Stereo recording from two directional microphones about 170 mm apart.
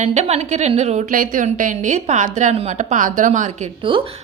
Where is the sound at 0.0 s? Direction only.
40° right (ahead or behind).